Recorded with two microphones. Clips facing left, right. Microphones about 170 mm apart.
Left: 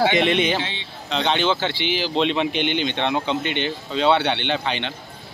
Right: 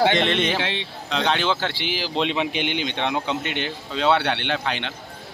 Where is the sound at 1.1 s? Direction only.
Centre (ahead or behind).